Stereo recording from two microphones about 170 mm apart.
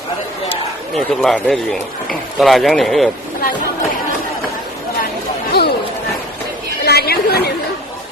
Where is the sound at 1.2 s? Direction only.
5° left (ahead or behind).